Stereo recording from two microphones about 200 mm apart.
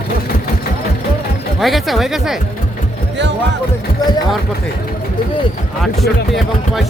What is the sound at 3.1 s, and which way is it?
Speech, 60° right (ahead or behind).